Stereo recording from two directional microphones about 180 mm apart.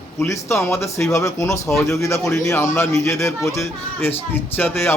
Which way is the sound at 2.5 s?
15° left (ahead or behind).